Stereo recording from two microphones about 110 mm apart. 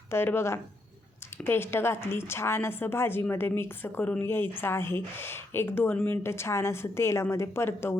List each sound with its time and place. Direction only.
0.1 s speech: 20° left (ahead or behind)